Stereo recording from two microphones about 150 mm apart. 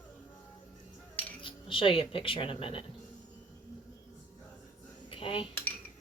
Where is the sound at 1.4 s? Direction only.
35° left (ahead or behind).